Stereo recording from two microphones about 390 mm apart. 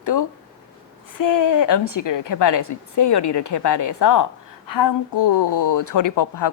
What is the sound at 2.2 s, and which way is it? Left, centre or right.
A woman's voice, left.